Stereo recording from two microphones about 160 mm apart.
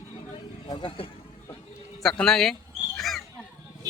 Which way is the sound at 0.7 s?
35° left (ahead or behind).